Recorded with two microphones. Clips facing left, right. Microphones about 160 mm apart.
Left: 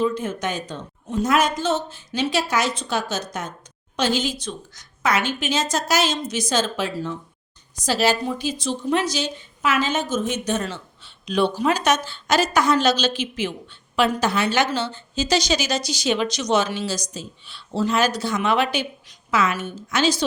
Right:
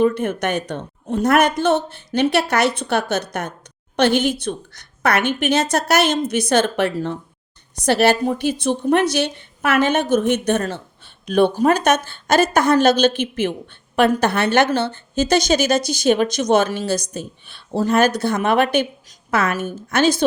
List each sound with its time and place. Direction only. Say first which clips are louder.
0.0 s a woman's voice: right 5 dB; 65° right (ahead or behind)